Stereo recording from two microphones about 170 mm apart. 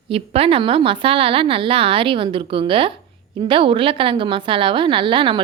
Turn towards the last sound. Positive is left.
turn(degrees=-30)  # may be behind; listen again after turning